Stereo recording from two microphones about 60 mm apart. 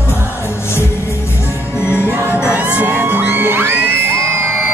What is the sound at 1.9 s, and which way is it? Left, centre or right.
Music, right.